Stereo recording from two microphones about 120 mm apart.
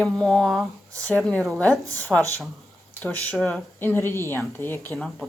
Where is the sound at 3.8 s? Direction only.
20° left (ahead or behind).